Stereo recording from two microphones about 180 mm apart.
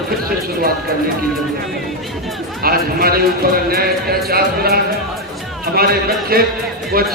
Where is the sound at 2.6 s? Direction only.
55° right (ahead or behind).